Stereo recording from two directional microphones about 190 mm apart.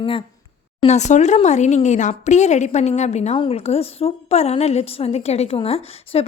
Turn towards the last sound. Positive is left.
turn(degrees=30)  # may be behind; listen again after turning